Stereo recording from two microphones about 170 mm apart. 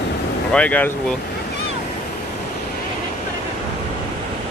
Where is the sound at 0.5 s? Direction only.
10° left (ahead or behind).